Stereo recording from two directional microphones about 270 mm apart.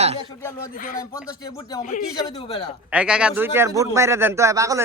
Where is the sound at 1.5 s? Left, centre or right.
Centre.